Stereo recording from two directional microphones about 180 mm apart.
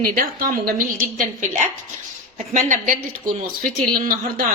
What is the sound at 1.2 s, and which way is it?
A woman's voice, 40° right (ahead or behind).